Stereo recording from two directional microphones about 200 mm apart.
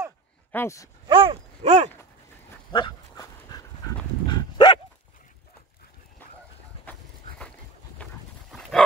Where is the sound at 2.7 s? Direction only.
20° left (ahead or behind).